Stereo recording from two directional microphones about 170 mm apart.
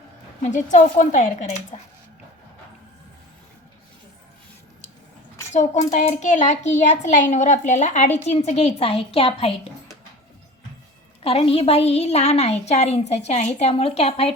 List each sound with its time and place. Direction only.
0.4 s a child's voice: 45° left (ahead or behind)
5.5 s a child's voice: 45° left (ahead or behind)
11.2 s a woman's voice: 35° left (ahead or behind)